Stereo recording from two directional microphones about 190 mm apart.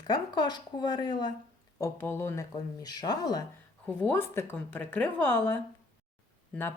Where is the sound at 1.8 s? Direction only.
10° left (ahead or behind).